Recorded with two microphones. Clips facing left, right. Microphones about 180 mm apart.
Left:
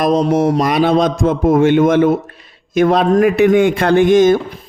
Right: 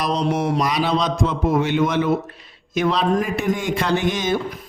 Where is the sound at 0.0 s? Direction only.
50° left (ahead or behind).